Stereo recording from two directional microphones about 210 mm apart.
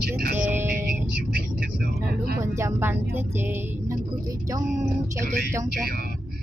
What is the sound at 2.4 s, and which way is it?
Speech, 15° right (ahead or behind).